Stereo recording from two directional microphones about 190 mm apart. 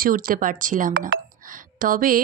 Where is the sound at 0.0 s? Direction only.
50° right (ahead or behind).